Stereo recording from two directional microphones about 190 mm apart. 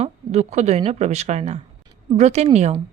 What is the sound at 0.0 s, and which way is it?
Speech, 35° right (ahead or behind).